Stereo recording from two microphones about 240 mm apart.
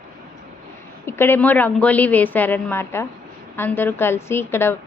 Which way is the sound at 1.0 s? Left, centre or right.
Centre.